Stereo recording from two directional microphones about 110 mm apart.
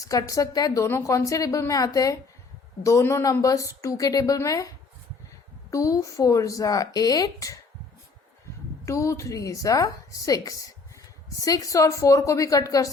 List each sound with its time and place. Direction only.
0.0 s a woman's voice: 30° left (ahead or behind)
5.7 s a woman's voice: 30° left (ahead or behind)
8.8 s a woman's voice: 25° left (ahead or behind)